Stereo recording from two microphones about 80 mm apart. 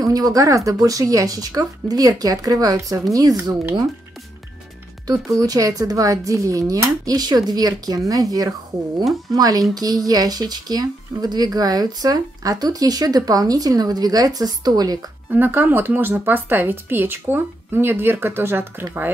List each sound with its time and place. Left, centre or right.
0.0 s speech: right
5.0 s speech: right
15.3 s speech: right